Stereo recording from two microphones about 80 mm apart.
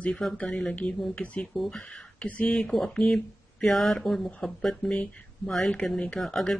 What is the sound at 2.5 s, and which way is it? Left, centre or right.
Speech, centre.